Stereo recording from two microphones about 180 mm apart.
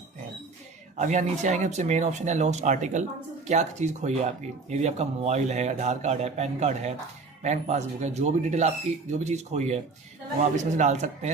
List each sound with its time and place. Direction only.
0.9 s speech: 40° right (ahead or behind)